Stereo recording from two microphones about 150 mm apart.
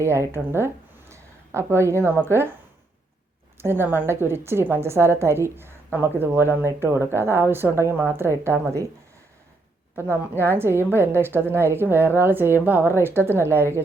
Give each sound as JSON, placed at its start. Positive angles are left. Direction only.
{"t": 0.0, "sound": "a woman's voice", "side_deg": -15}
{"t": 3.6, "sound": "a woman's voice", "side_deg": -15}
{"t": 9.9, "sound": "a woman's voice", "side_deg": -15}